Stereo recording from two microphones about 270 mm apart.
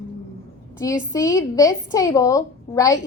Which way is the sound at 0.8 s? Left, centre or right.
Centre.